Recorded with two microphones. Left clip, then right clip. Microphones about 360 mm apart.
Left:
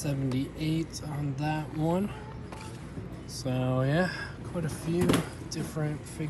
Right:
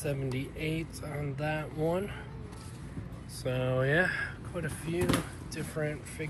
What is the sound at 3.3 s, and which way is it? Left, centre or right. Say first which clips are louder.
Speech: even; centre.